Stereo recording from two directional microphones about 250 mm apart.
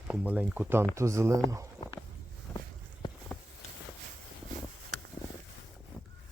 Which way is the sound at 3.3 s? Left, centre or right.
Centre.